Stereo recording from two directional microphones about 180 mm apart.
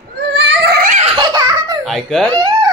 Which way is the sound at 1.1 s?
20° right (ahead or behind).